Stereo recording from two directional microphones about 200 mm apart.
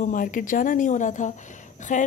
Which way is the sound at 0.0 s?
40° left (ahead or behind).